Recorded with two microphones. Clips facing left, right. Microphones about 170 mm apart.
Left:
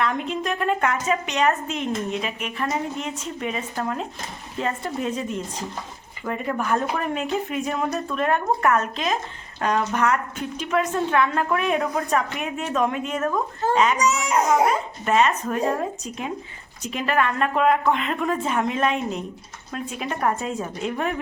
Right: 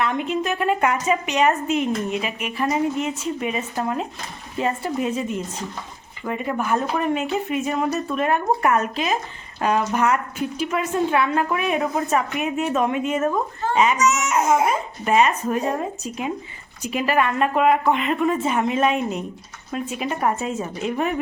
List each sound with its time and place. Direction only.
0.0 s a woman's voice: 5° right (ahead or behind)
14.0 s speech: 30° left (ahead or behind)
14.7 s a woman's voice: 10° right (ahead or behind)